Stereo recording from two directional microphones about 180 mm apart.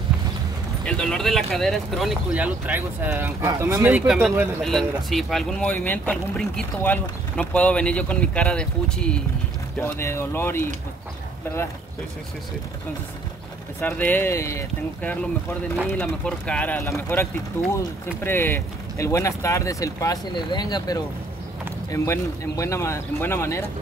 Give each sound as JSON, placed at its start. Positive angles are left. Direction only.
{"t": 0.8, "sound": "speech", "side_deg": 5}
{"t": 13.7, "sound": "speech", "side_deg": 10}